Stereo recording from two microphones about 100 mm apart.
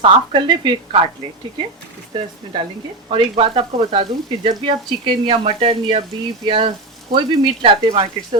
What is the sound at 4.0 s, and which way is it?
Speech, 60° right (ahead or behind).